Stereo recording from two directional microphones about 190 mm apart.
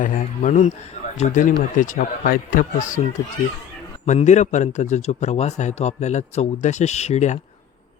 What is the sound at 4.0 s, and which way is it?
A man's voice, 35° left (ahead or behind).